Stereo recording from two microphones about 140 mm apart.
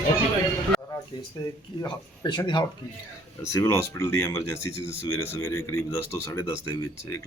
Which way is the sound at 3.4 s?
20° left (ahead or behind).